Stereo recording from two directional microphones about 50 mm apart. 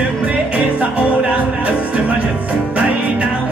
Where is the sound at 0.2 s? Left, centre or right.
Right.